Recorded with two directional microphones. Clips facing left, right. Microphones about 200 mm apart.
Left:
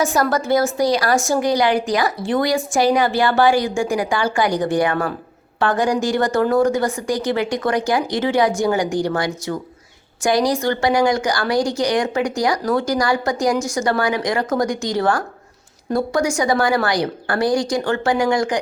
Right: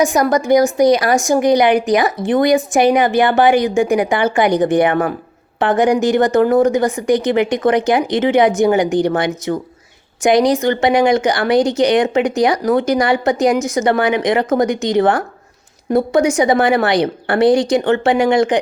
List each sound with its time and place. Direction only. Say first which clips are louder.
0.0 s a woman's voice: right 4 dB; 15° right (ahead or behind)